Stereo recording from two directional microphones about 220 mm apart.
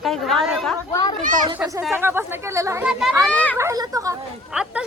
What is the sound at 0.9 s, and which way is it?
Speech, 15° left (ahead or behind).